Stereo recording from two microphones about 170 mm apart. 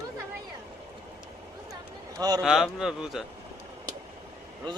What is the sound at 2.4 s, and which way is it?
Speech, 5° right (ahead or behind).